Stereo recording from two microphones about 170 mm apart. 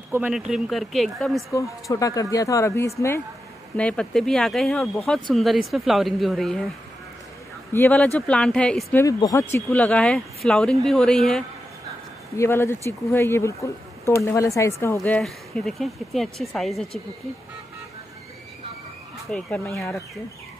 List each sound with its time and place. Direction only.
0.1 s speech: 5° right (ahead or behind)
1.5 s speech: 20° left (ahead or behind)
3.7 s speech: 5° left (ahead or behind)
7.7 s speech: 10° left (ahead or behind)
9.0 s speech: 20° left (ahead or behind); by 11.4 s 5° left (ahead or behind)
12.4 s speech: 15° left (ahead or behind)
15.0 s speech: 5° left (ahead or behind)
19.3 s speech: 5° left (ahead or behind)